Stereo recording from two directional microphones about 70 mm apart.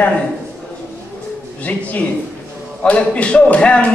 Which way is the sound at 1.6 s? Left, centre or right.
Left.